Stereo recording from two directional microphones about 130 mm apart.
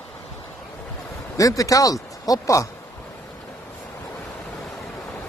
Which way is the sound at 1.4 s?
25° left (ahead or behind).